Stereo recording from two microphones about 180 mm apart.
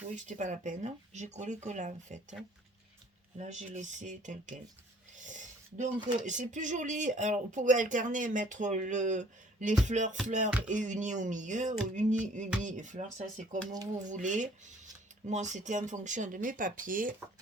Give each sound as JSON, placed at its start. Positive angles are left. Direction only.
{"t": 0.3, "sound": "speech", "side_deg": -45}
{"t": 3.3, "sound": "speech", "side_deg": -40}
{"t": 5.2, "sound": "a sound", "side_deg": -45}
{"t": 6.0, "sound": "speech", "side_deg": -25}
{"t": 6.2, "sound": "speech", "side_deg": -45}